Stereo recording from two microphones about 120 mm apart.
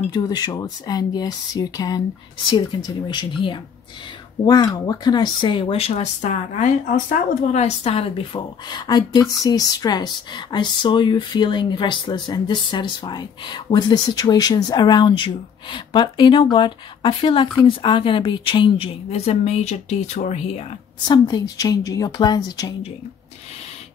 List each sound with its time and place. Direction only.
0.1 s a woman's voice: 35° left (ahead or behind); by 8.4 s 55° left (ahead or behind)
8.6 s a woman's voice: 35° left (ahead or behind); by 20.6 s 65° left (ahead or behind)
21.1 s a woman's voice: 35° left (ahead or behind)